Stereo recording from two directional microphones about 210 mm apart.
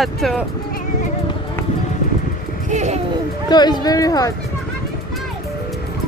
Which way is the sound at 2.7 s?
35° right (ahead or behind).